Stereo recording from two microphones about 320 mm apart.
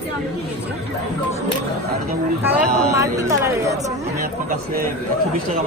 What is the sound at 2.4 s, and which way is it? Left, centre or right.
Speech, centre.